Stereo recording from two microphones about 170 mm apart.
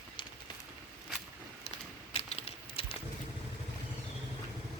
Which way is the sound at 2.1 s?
35° left (ahead or behind).